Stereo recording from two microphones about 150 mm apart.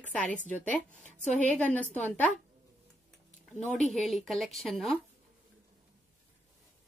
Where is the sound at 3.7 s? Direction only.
Centre (ahead or behind).